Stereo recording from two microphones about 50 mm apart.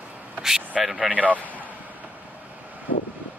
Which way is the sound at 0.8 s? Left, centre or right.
Centre.